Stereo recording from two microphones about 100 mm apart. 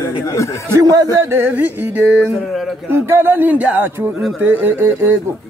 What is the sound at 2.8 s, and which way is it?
Speech, 25° right (ahead or behind).